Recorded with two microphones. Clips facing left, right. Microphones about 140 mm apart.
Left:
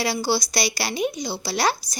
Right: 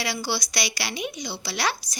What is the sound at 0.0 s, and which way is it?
A woman's voice, 35° left (ahead or behind).